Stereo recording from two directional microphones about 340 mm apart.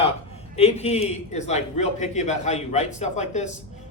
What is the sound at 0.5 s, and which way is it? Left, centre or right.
A man's voice, centre.